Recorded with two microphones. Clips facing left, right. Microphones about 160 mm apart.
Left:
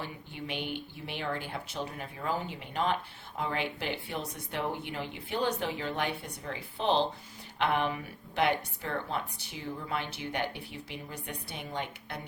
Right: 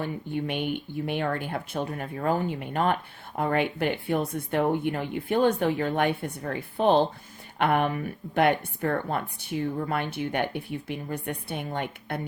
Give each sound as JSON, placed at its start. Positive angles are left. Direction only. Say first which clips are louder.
{"t": 0.0, "sound": "speech", "louder": "right 10 dB", "side_deg": -55}